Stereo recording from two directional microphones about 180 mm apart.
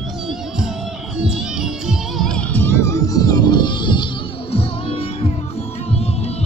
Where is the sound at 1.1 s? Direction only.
5° right (ahead or behind).